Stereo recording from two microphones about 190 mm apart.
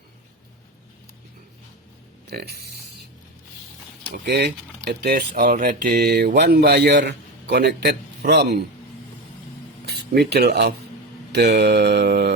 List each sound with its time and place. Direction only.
2.3 s speech: 55° right (ahead or behind)
4.1 s speech: 60° right (ahead or behind)
9.8 s speech: 60° right (ahead or behind)